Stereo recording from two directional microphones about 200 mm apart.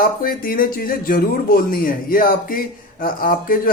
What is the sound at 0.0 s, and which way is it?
Speech, 45° left (ahead or behind).